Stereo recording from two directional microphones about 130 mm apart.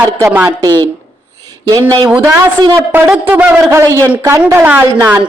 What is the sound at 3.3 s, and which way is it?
A woman's voice, 15° right (ahead or behind).